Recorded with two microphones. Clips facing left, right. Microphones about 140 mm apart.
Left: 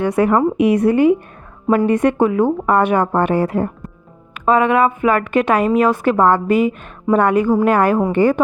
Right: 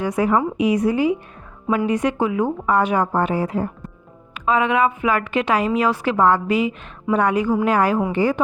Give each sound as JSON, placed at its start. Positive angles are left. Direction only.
{"t": 0.0, "sound": "a woman's voice", "side_deg": 65}
{"t": 1.6, "sound": "a woman's voice", "side_deg": 45}
{"t": 4.4, "sound": "a woman's voice", "side_deg": 50}